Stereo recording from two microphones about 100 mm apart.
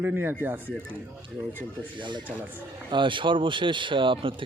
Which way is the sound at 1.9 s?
50° right (ahead or behind).